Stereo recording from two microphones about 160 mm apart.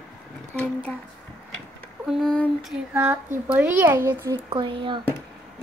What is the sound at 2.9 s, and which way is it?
A child's voice, 10° right (ahead or behind).